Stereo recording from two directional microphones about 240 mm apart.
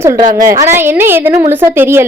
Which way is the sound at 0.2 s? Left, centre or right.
Right.